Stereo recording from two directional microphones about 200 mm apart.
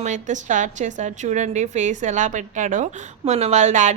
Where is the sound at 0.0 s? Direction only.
40° right (ahead or behind).